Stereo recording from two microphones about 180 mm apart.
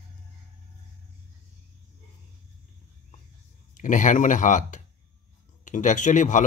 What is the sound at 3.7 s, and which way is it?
A man's voice, 45° left (ahead or behind).